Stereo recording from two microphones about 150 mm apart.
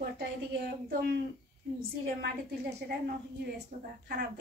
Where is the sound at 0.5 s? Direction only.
90° right.